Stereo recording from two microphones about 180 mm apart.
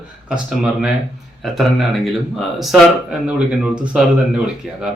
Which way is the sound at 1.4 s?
Centre (ahead or behind).